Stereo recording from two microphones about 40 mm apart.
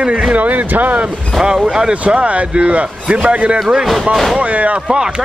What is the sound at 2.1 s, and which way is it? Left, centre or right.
A man's voice, right.